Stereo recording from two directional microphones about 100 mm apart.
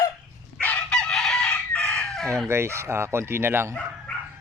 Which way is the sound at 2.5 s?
25° right (ahead or behind).